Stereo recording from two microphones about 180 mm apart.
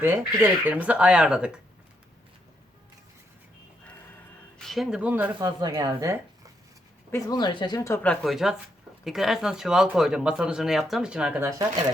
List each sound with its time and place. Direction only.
0.0 s speech: 10° right (ahead or behind)
4.5 s speech: centre (ahead or behind)
5.4 s speech: 20° right (ahead or behind)
7.1 s speech: 20° left (ahead or behind); by 11.4 s 5° right (ahead or behind)